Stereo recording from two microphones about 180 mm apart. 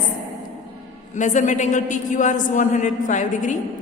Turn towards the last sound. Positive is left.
turn(degrees=45)  # may be behind; listen again after turning